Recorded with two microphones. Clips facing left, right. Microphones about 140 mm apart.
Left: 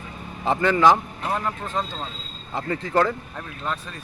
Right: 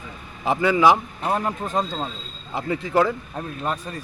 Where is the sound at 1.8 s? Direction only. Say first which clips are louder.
Right 4 dB; 40° right (ahead or behind).